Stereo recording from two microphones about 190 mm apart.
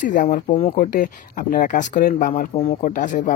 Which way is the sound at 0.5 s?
30° left (ahead or behind).